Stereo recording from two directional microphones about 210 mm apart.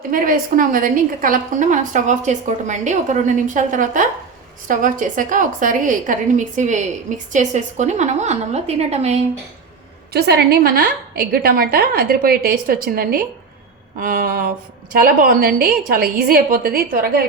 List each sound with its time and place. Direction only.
0.1 s a woman's voice: 40° right (ahead or behind)
10.1 s a woman's voice: 50° right (ahead or behind)